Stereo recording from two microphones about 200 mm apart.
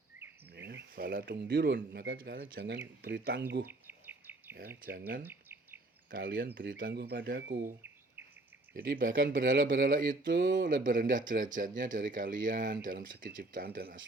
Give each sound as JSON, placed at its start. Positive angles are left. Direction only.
{"t": 0.5, "sound": "speech", "side_deg": -60}
{"t": 3.7, "sound": "bird vocalization", "side_deg": -10}
{"t": 4.8, "sound": "speech", "side_deg": -45}
{"t": 5.2, "sound": "insect", "side_deg": -10}
{"t": 6.1, "sound": "speech", "side_deg": -45}
{"t": 9.6, "sound": "speech", "side_deg": -45}
{"t": 10.2, "sound": "speech", "side_deg": -65}
{"t": 10.8, "sound": "speech", "side_deg": -40}